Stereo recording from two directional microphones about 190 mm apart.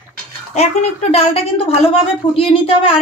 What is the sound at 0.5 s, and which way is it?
A woman's voice, 35° left (ahead or behind).